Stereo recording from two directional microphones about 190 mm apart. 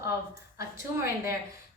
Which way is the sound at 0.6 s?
15° right (ahead or behind).